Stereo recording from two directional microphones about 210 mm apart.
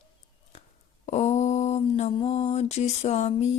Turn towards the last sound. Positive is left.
turn(degrees=35)  # may be behind; listen again after turning